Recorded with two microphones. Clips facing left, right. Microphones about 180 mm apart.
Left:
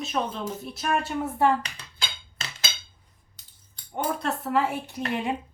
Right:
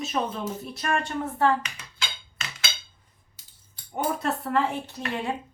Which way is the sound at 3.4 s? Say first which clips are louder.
Even; 10° right (ahead or behind).